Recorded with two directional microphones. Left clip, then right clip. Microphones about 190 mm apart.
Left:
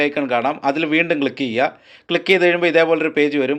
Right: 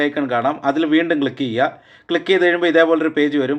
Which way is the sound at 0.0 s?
30° left (ahead or behind).